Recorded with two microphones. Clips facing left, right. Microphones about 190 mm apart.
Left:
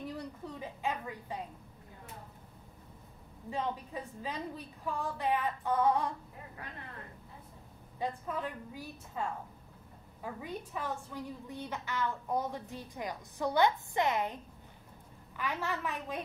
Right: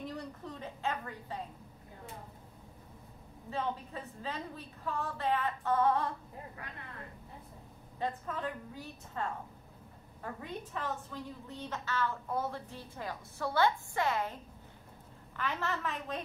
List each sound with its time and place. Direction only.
0.1 s a sound: 10° left (ahead or behind)
3.4 s a woman's voice: 15° left (ahead or behind)
8.0 s a woman's voice: 10° left (ahead or behind)
10.2 s a woman's voice: 10° left (ahead or behind)
15.3 s a woman's voice: 10° left (ahead or behind)